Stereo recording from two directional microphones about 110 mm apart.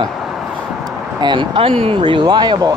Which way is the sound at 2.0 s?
45° right (ahead or behind).